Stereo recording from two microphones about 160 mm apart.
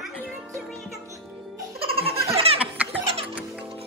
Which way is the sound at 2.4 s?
35° right (ahead or behind).